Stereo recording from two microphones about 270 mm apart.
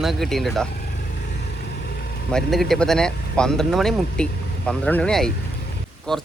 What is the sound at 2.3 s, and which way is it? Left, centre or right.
Speech, centre.